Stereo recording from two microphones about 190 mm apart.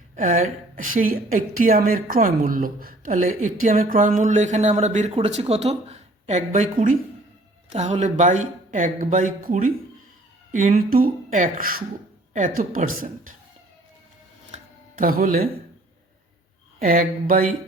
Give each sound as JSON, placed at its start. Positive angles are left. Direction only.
{"t": 0.2, "sound": "a woman's voice", "side_deg": -40}
{"t": 14.5, "sound": "music", "side_deg": -50}
{"t": 16.8, "sound": "a woman's voice", "side_deg": -45}